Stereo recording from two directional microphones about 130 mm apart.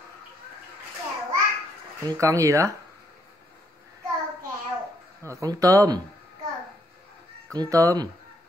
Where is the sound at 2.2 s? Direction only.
25° right (ahead or behind).